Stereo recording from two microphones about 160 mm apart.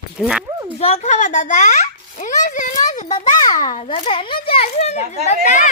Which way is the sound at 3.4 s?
25° left (ahead or behind).